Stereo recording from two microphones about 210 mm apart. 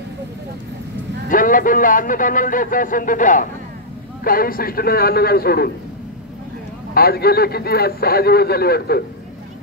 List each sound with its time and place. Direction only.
1.3 s a man's voice: 40° left (ahead or behind)
6.9 s a man's voice: 45° left (ahead or behind)